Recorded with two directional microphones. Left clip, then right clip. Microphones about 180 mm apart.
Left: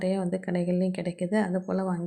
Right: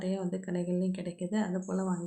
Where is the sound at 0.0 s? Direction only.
30° left (ahead or behind).